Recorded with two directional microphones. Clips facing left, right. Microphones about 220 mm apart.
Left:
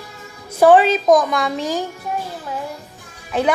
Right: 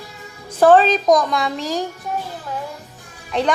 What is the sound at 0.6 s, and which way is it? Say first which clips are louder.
A woman's voice: left 1 dB; 10° left (ahead or behind).